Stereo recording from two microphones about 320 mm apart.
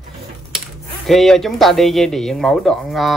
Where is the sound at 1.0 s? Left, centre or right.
Centre.